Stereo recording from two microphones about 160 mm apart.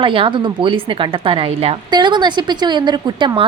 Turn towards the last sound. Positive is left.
turn(degrees=-30)  # may be behind; listen again after turning